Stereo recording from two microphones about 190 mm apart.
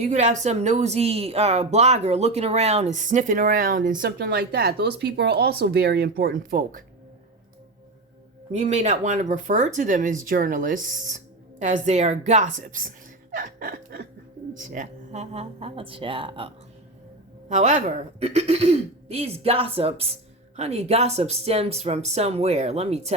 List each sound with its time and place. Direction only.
0.0 s a woman's voice: 40° right (ahead or behind)
8.5 s speech: 35° right (ahead or behind)
13.3 s chuckle: 45° right (ahead or behind)
14.5 s speech: 45° right (ahead or behind); by 16.5 s 25° right (ahead or behind)
17.5 s speech: 40° right (ahead or behind)